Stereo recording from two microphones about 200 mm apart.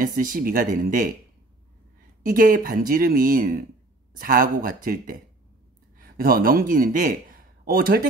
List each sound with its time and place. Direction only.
0.0 s speech: 45° right (ahead or behind)
2.2 s a man's voice: 45° right (ahead or behind)